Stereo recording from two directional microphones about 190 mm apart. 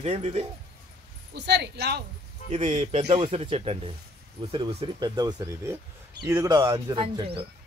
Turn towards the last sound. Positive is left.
turn(degrees=-30)  # may be behind; listen again after turning